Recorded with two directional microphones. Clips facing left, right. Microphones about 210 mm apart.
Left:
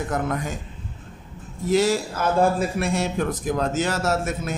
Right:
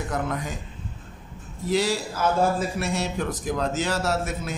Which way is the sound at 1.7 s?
50° left (ahead or behind).